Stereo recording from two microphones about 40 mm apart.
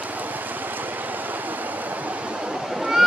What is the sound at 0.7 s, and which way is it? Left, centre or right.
Waves, right.